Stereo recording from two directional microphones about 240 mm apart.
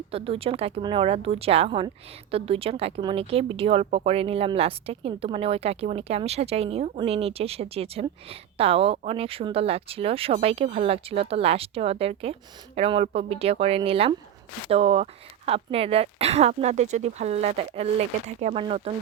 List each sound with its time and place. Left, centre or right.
0.1 s speech: right